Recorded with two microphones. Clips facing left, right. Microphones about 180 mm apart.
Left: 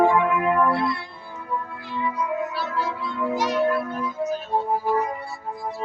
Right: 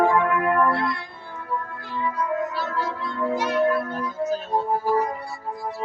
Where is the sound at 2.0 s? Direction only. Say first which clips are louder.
Right 1 dB; 10° left (ahead or behind).